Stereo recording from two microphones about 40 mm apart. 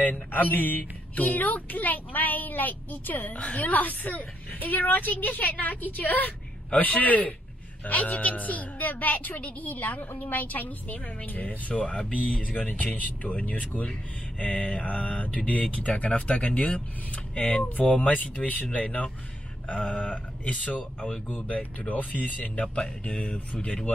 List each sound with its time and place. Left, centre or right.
0.0 s speech: left
3.3 s speech: left
3.6 s a woman's voice: left
11.9 s speech: left
13.7 s speech: left
18.9 s speech: left